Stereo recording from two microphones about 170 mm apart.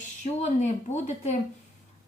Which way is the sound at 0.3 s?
45° left (ahead or behind).